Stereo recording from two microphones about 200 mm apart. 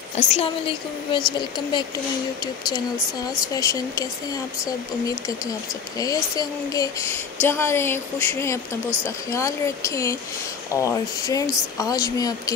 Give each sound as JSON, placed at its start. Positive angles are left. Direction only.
{"t": 0.1, "sound": "a woman's voice", "side_deg": 35}
{"t": 3.5, "sound": "speech", "side_deg": 15}